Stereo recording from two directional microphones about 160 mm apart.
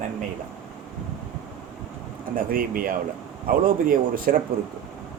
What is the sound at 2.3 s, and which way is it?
Speech, 60° right (ahead or behind).